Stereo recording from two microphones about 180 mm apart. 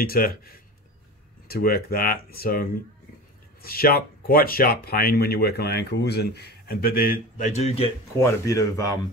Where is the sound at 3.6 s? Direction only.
55° left (ahead or behind); by 7.8 s 35° left (ahead or behind).